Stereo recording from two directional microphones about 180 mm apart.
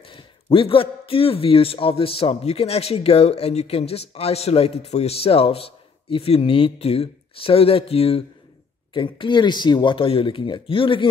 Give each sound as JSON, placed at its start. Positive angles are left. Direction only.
{"t": 0.0, "sound": "a man's voice", "side_deg": 30}